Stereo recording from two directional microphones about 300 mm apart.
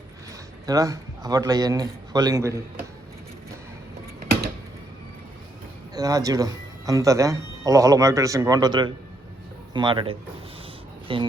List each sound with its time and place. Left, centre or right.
0.6 s speech: centre
5.9 s speech: centre